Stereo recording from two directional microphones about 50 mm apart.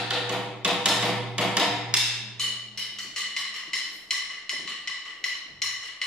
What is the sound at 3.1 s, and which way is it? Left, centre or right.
Music, centre.